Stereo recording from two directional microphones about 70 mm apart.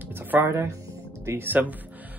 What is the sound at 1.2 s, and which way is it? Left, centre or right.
Speech, right.